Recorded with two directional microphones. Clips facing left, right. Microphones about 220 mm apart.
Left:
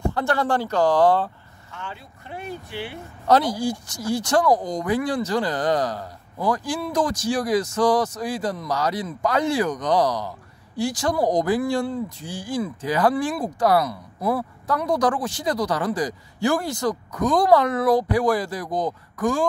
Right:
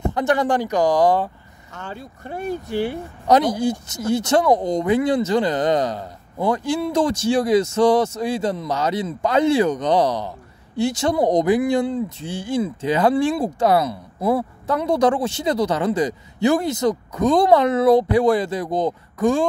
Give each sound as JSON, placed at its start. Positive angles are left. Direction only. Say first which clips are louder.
{"t": 0.0, "sound": "speech", "louder": "right 3 dB", "side_deg": -20}
{"t": 1.7, "sound": "speech", "louder": "right 4 dB", "side_deg": -40}
{"t": 3.3, "sound": "speech", "louder": "right 3 dB", "side_deg": -20}